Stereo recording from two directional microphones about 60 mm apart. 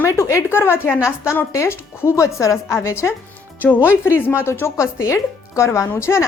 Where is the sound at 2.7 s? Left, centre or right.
Left.